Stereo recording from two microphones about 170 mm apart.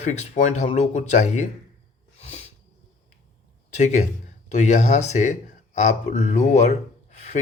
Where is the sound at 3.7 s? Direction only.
45° left (ahead or behind).